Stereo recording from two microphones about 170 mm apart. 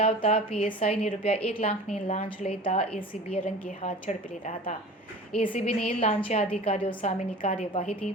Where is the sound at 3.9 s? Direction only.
45° left (ahead or behind).